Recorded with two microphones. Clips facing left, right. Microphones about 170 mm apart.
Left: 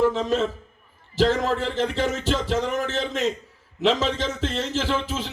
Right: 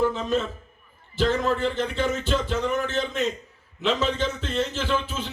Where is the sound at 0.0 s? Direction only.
90° left.